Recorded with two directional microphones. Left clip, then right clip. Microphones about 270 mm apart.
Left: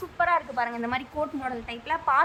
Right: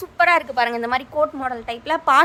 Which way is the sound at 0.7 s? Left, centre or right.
Centre.